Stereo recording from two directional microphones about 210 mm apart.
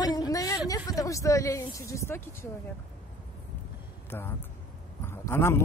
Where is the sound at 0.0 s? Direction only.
20° left (ahead or behind).